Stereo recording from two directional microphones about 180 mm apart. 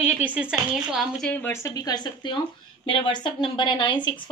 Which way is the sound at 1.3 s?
10° left (ahead or behind).